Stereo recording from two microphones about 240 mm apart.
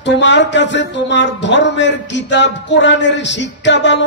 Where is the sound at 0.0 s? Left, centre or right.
Left.